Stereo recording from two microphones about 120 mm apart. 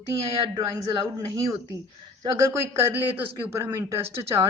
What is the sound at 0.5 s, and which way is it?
Speech, 30° right (ahead or behind).